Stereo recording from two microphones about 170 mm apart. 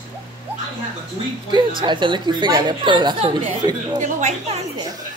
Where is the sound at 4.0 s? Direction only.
45° right (ahead or behind).